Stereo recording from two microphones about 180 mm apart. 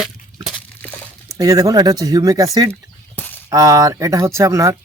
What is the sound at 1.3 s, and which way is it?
A man's voice, 20° right (ahead or behind).